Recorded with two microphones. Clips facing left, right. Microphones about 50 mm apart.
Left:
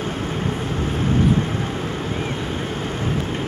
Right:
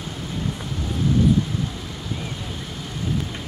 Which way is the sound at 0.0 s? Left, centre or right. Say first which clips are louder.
Left 5 dB; left.